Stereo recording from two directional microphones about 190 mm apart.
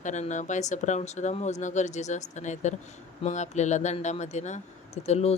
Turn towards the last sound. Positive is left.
turn(degrees=35)  # may be behind; listen again after turning